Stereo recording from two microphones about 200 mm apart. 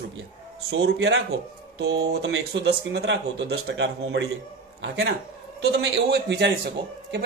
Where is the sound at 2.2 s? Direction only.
60° right (ahead or behind).